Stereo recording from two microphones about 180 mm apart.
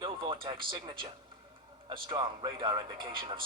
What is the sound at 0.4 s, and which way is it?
Speech, 30° right (ahead or behind).